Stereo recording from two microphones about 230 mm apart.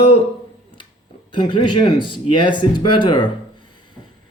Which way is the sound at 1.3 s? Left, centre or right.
Left.